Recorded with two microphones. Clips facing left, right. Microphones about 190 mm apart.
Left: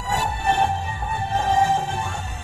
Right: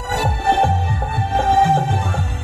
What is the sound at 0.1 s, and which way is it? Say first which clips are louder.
Music: right 4 dB; 80° right.